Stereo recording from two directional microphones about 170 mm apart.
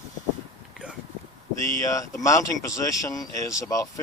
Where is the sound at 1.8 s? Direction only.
20° left (ahead or behind).